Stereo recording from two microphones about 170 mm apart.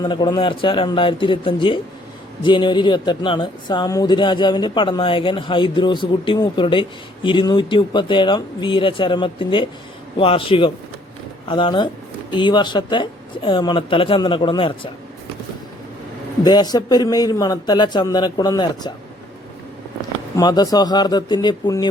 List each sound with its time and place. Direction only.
0.0 s a man's voice: 25° left (ahead or behind)
16.4 s speech: 25° left (ahead or behind)
20.3 s speech: 25° left (ahead or behind)